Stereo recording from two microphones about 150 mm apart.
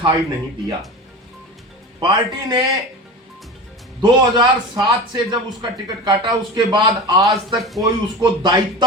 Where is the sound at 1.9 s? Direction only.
30° right (ahead or behind).